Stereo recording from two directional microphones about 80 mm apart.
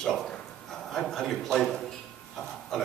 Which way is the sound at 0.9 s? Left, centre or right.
Centre.